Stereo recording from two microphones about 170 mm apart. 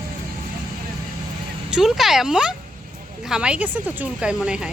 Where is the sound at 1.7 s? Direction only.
Centre (ahead or behind).